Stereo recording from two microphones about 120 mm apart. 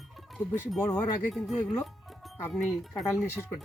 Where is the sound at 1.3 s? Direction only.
Centre (ahead or behind).